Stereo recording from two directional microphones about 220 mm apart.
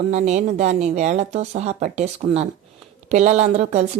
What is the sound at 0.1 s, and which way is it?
Speech, 35° right (ahead or behind).